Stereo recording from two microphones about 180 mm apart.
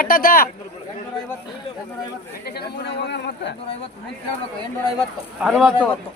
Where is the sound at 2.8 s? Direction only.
70° left (ahead or behind).